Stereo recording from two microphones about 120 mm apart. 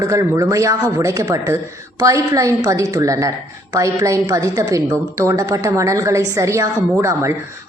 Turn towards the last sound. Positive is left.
turn(degrees=-25)  # may be behind; listen again after turning